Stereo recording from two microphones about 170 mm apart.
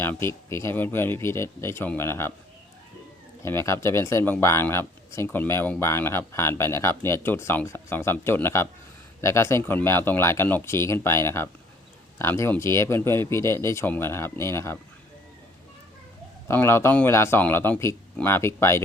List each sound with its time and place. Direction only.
0.0 s speech: 15° left (ahead or behind)
3.4 s speech: 15° left (ahead or behind)
16.5 s speech: 15° left (ahead or behind)